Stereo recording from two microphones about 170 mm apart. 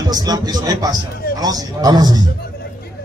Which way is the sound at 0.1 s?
25° right (ahead or behind).